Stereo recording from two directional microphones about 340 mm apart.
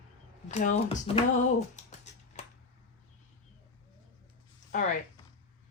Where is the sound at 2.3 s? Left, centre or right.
Centre.